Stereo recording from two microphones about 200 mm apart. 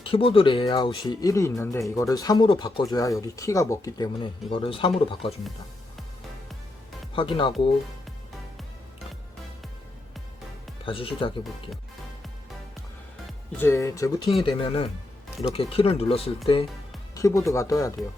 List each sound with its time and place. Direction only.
0.0 s speech: 25° left (ahead or behind)
7.1 s speech: 25° left (ahead or behind)
10.8 s speech: 25° left (ahead or behind)
13.6 s speech: 15° left (ahead or behind); by 16.3 s 30° left (ahead or behind)
17.2 s speech: 15° left (ahead or behind)